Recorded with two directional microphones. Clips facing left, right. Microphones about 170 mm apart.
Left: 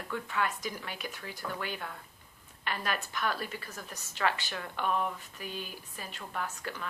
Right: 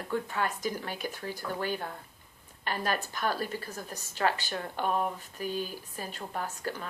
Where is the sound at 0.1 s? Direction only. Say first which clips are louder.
Right 2 dB; 35° right (ahead or behind).